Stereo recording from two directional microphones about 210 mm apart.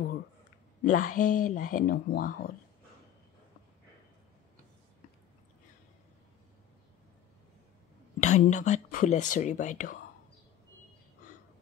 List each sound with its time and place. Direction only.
0.8 s speech: 40° left (ahead or behind)
8.2 s speech: 35° left (ahead or behind)